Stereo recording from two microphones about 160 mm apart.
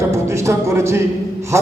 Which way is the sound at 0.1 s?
15° right (ahead or behind).